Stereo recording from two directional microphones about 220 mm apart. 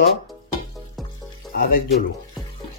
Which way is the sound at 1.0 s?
Centre (ahead or behind).